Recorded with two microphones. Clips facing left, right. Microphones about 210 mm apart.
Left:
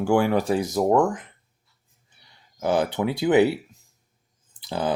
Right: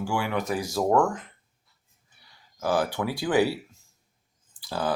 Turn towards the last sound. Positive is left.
turn(degrees=20)  # may be behind; listen again after turning